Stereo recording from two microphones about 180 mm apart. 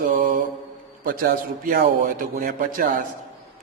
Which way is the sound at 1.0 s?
55° right (ahead or behind).